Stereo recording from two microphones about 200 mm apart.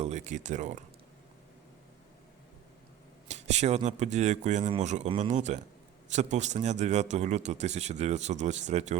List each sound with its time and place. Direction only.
0.0 s speech: 35° right (ahead or behind)
3.2 s speech: 35° right (ahead or behind)